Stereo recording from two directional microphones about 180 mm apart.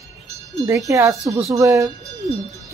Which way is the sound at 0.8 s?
15° right (ahead or behind).